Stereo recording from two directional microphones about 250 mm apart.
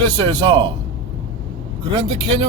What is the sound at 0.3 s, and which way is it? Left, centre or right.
Speech, centre.